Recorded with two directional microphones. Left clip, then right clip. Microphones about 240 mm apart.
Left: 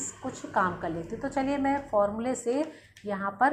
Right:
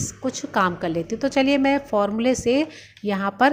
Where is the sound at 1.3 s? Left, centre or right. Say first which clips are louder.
Right 8 dB; right.